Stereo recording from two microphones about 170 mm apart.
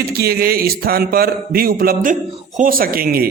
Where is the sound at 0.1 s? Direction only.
65° right (ahead or behind).